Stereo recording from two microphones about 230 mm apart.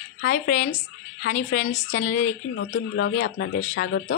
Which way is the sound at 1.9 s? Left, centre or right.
Left.